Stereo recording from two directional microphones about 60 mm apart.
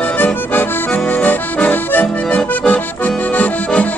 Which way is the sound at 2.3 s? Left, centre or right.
Left.